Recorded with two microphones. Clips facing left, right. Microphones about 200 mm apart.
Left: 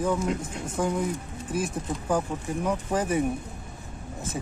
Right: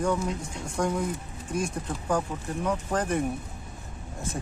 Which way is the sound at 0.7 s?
5° left (ahead or behind).